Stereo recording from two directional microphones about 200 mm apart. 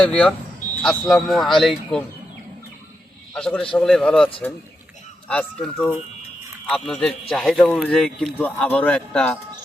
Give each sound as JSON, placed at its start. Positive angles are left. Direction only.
{"t": 0.0, "sound": "a man's voice", "side_deg": 5}
{"t": 3.3, "sound": "a man's voice", "side_deg": 5}
{"t": 5.3, "sound": "a man's voice", "side_deg": 5}